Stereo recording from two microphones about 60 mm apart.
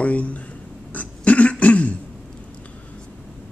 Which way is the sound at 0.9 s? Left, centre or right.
Left.